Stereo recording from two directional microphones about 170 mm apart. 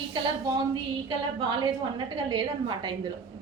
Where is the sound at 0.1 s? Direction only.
30° right (ahead or behind).